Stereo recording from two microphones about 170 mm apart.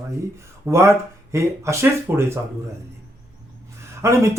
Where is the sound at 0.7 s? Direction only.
15° right (ahead or behind).